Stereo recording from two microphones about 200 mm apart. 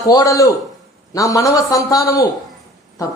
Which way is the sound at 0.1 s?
15° left (ahead or behind).